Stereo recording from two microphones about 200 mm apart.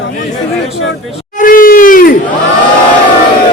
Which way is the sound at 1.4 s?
45° left (ahead or behind).